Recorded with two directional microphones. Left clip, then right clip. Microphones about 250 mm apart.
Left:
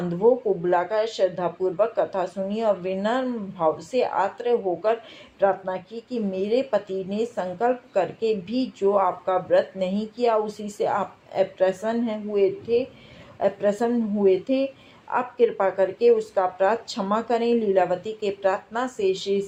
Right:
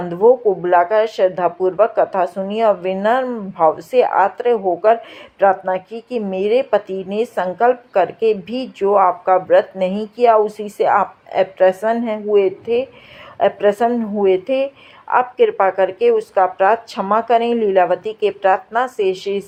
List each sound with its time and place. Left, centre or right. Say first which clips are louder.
0.1 s a woman's voice: right 8 dB; right